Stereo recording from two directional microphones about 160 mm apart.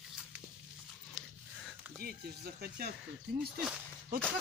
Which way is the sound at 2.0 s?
70° right (ahead or behind).